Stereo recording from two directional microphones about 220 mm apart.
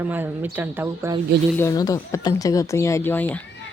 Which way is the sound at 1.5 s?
15° left (ahead or behind).